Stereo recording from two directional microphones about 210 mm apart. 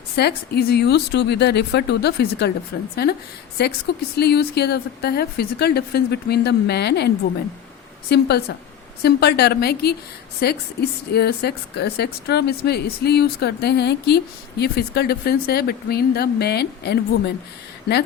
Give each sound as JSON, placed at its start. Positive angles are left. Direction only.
{"t": 0.2, "sound": "a woman's voice", "side_deg": 50}
{"t": 8.1, "sound": "a woman's voice", "side_deg": 50}